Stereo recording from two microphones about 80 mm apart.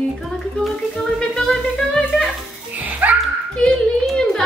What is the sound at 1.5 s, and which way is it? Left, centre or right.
Music, centre.